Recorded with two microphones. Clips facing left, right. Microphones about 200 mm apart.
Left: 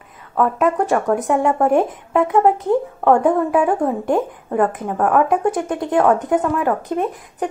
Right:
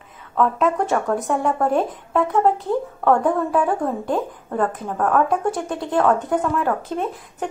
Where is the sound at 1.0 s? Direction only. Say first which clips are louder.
Left 4 dB; 20° left (ahead or behind).